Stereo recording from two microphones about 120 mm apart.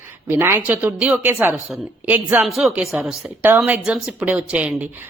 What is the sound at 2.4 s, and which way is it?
Speech, centre (ahead or behind).